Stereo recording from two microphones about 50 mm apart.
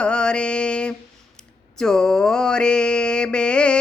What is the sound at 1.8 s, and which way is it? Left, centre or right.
Mantra, centre.